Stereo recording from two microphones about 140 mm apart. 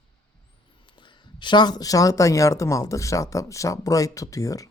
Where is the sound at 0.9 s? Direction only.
35° left (ahead or behind).